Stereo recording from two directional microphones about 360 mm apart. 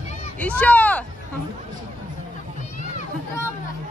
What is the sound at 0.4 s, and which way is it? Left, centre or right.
Speech, centre.